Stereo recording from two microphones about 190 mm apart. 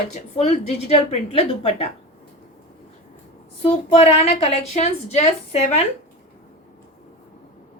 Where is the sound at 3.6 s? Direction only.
30° left (ahead or behind).